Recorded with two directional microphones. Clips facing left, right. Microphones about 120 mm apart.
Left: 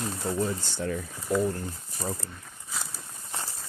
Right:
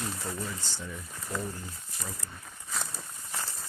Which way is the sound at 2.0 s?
35° left (ahead or behind).